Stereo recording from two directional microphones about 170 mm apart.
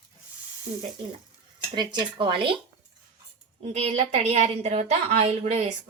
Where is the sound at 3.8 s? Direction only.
40° right (ahead or behind).